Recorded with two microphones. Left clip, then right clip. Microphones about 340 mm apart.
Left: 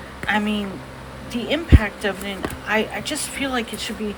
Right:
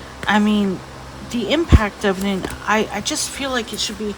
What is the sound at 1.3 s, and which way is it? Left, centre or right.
Speech, centre.